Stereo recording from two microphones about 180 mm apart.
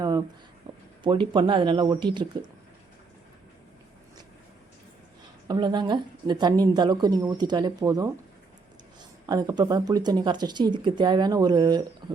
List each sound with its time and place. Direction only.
0.7 s a sound: 20° right (ahead or behind)
1.0 s a woman's voice: 25° right (ahead or behind)
5.5 s a woman's voice: 25° right (ahead or behind)